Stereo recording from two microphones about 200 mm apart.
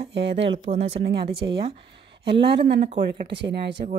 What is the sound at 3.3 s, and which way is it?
Speech, 60° right (ahead or behind).